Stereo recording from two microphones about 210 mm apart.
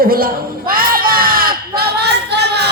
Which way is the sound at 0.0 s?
45° right (ahead or behind).